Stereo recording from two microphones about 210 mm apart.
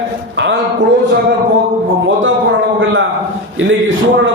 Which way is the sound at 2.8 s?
65° right (ahead or behind).